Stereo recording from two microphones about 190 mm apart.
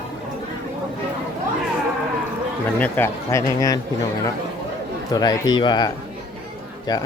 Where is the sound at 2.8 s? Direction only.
10° left (ahead or behind).